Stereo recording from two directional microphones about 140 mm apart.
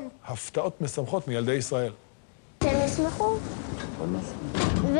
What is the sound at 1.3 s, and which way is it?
Speech, 10° left (ahead or behind).